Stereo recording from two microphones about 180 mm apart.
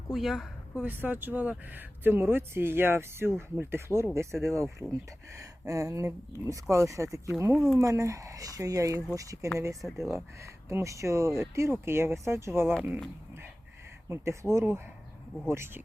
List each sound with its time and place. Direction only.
0.1 s speech: centre (ahead or behind); by 9.5 s 20° right (ahead or behind)
9.8 s speech: centre (ahead or behind)
10.7 s speech: 15° right (ahead or behind)
14.1 s speech: 15° right (ahead or behind)